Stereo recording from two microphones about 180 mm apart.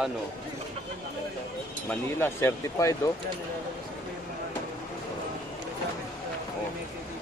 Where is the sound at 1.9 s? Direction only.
15° left (ahead or behind).